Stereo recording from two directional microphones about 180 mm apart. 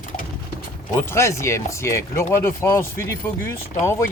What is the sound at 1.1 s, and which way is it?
Speech, 15° left (ahead or behind).